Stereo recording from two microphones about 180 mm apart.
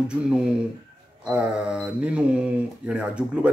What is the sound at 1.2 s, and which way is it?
Speech, 5° right (ahead or behind).